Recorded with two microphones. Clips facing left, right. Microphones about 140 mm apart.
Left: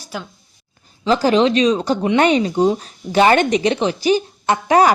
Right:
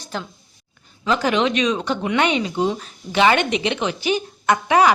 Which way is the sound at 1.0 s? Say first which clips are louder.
Left 5 dB; 35° left (ahead or behind).